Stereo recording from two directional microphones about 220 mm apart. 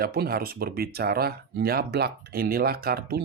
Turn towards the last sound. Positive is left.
turn(degrees=-45)  # may be behind; listen again after turning